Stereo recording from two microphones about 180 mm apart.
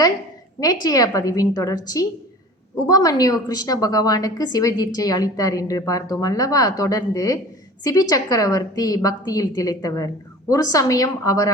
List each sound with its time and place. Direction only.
0.6 s a woman's voice: 20° left (ahead or behind)